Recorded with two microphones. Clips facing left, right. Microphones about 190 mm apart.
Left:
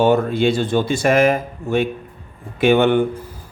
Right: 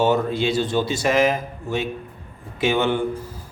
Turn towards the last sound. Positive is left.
turn(degrees=60)  # may be behind; listen again after turning